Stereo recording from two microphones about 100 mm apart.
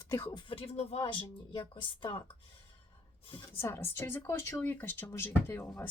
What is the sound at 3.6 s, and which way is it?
Speech, 25° left (ahead or behind).